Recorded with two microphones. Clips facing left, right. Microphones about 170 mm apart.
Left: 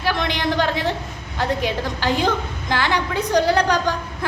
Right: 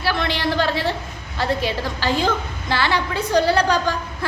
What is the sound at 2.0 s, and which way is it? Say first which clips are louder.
A woman's voice: even; 15° left (ahead or behind).